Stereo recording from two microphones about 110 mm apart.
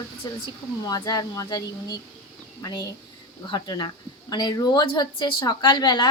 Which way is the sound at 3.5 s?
40° left (ahead or behind).